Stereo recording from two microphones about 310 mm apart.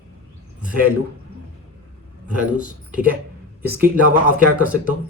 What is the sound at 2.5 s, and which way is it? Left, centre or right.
Speech, centre.